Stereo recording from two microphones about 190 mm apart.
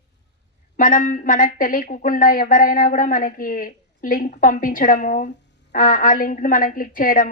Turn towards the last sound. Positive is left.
turn(degrees=45)  # may be behind; listen again after turning